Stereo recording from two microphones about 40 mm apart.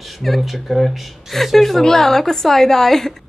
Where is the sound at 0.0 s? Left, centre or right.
Centre.